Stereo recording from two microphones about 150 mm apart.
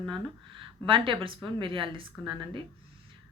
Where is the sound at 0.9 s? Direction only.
35° right (ahead or behind).